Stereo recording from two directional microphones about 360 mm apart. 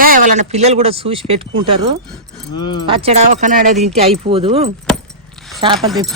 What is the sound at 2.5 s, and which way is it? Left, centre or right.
Speech, centre.